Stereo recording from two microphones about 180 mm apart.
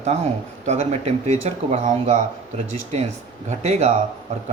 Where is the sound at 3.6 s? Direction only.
40° right (ahead or behind).